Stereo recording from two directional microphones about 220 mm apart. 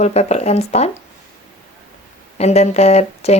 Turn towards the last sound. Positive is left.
turn(degrees=30)  # may be behind; listen again after turning